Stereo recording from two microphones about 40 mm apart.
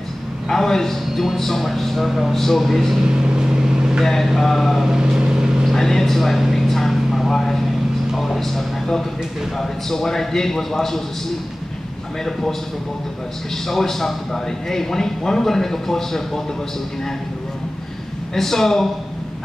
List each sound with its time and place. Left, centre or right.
0.5 s a man's voice: centre
3.0 s vehicle: centre
4.0 s a man's voice: centre
4.8 s vehicle: centre
5.7 s a man's voice: centre
6.5 s vehicle: centre
8.2 s a sound: centre
9.6 s a man's voice: centre
12.3 s a man's voice: centre
13.7 s a man's voice: centre
18.3 s a man's voice: centre